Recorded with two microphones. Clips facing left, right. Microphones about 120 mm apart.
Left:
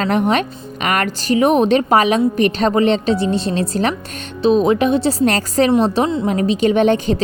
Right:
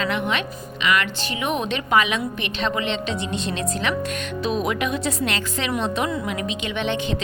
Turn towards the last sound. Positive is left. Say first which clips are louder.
# left 10 dB
turn(degrees=40)  # may be behind; listen again after turning